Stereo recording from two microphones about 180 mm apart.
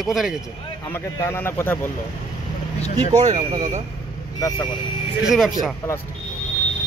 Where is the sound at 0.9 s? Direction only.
15° left (ahead or behind).